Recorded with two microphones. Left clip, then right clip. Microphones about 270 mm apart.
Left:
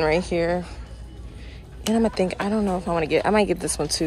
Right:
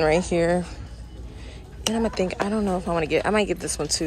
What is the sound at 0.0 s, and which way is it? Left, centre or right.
Speech, centre.